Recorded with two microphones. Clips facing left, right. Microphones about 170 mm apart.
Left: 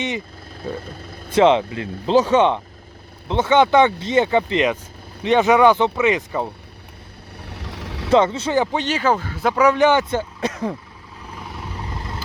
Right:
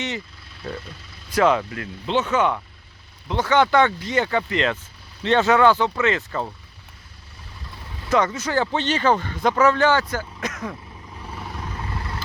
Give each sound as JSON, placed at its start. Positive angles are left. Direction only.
{"t": 0.8, "sound": "vehicle", "side_deg": 50}
{"t": 1.3, "sound": "speech", "side_deg": 25}
{"t": 7.4, "sound": "vehicle", "side_deg": 75}
{"t": 8.1, "sound": "speech", "side_deg": 25}
{"t": 8.6, "sound": "speech", "side_deg": 10}
{"t": 11.8, "sound": "vehicle", "side_deg": 20}